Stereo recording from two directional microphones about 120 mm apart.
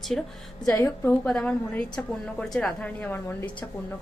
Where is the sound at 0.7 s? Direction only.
20° left (ahead or behind).